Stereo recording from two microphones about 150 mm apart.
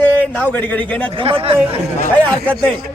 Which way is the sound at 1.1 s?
35° right (ahead or behind).